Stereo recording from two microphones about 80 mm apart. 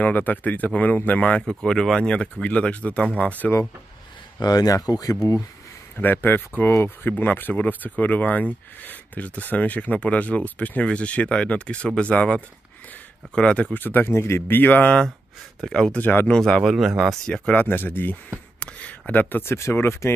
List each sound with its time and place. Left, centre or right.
0.0 s speech: left
1.5 s speech: centre
4.4 s speech: left
5.9 s speech: left
13.7 s speech: left; by 16.0 s centre
16.0 s speech: left
16.3 s speech: centre
16.6 s speech: centre
17.3 s speech: centre